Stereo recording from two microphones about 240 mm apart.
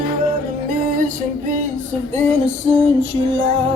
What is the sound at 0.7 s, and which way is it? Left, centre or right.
Music, right.